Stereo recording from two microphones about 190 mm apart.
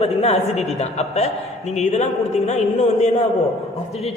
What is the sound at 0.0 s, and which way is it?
A man's voice, 35° left (ahead or behind).